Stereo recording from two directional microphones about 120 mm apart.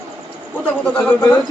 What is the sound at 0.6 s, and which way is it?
Speech, 10° left (ahead or behind).